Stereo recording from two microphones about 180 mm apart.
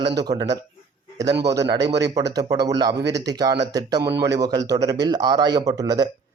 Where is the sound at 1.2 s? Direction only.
70° right (ahead or behind).